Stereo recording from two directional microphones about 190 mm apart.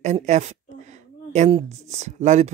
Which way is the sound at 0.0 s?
35° right (ahead or behind).